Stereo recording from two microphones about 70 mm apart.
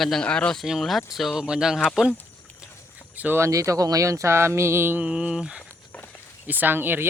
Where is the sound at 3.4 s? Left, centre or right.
Right.